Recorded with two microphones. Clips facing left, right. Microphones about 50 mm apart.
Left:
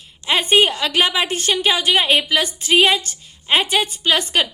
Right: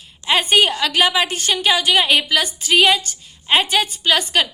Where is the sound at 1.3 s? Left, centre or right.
Left.